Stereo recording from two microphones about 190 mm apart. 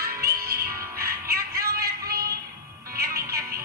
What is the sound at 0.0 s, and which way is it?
Music, 55° right (ahead or behind).